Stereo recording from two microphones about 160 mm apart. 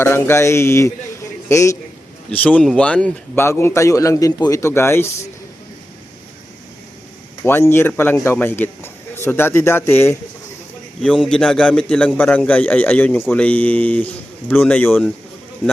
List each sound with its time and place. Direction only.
0.0 s a man's voice: 15° left (ahead or behind)
7.4 s a man's voice: 15° left (ahead or behind)
11.0 s a man's voice: centre (ahead or behind)